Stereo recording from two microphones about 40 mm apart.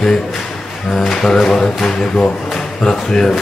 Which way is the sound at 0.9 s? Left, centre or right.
Centre.